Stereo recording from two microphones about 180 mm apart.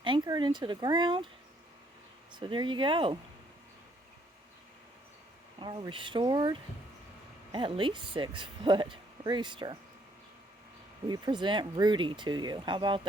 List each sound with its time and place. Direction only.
0.0 s speech: 25° right (ahead or behind)
2.3 s speech: 25° right (ahead or behind)
5.5 s speech: 25° right (ahead or behind)
11.1 s speech: 25° right (ahead or behind)